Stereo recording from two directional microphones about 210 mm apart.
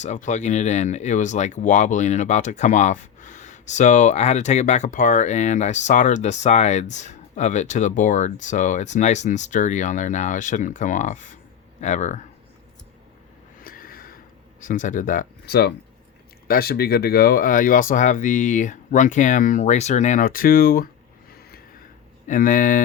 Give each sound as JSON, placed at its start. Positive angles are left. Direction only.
{"t": 0.0, "sound": "speech", "side_deg": 35}
{"t": 13.6, "sound": "a sound", "side_deg": 45}
{"t": 14.6, "sound": "speech", "side_deg": 40}